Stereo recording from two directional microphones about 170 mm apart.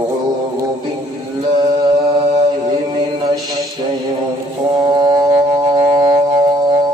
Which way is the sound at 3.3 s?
20° right (ahead or behind).